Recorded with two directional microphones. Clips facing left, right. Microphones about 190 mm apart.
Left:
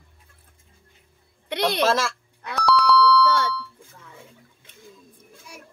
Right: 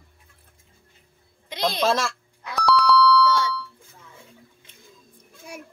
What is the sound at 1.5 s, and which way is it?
Speech, 65° left (ahead or behind).